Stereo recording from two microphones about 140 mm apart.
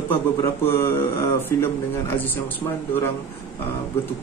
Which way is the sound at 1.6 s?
15° left (ahead or behind).